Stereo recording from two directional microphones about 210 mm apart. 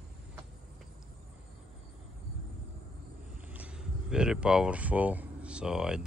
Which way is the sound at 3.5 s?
5° right (ahead or behind).